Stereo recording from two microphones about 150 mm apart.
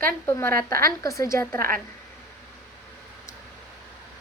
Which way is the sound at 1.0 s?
20° left (ahead or behind).